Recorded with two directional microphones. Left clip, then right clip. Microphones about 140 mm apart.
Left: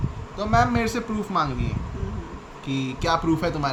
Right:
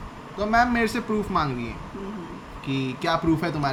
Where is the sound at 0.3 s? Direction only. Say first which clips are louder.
Even; 25° left (ahead or behind).